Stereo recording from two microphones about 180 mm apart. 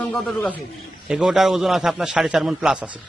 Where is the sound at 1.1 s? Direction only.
5° right (ahead or behind).